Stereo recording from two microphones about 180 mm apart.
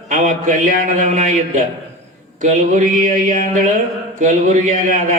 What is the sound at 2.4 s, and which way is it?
A man's voice, 45° right (ahead or behind).